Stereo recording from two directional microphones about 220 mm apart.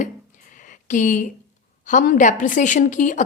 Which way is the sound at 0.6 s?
35° left (ahead or behind).